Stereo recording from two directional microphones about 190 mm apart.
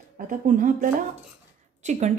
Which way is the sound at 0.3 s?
45° right (ahead or behind).